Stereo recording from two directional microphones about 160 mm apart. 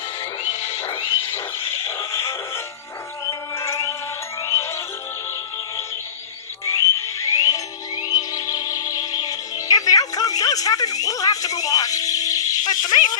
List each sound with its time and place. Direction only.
1.8 s a sound: 15° left (ahead or behind)
3.2 s music: 20° left (ahead or behind)
6.7 s music: 20° left (ahead or behind)